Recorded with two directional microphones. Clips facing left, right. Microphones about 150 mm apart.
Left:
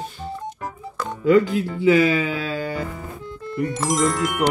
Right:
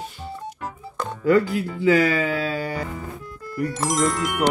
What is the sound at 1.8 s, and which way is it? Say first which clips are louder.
Music: left 2 dB; 40° right (ahead or behind).